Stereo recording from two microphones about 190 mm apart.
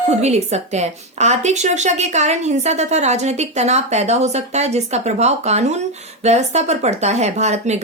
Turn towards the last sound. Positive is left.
turn(degrees=-35)  # may be behind; listen again after turning